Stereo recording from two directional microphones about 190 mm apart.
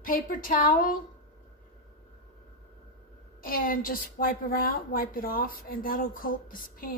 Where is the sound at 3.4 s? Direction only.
50° left (ahead or behind).